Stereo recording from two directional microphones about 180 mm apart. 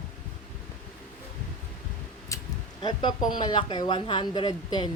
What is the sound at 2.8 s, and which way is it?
Speech, 25° left (ahead or behind).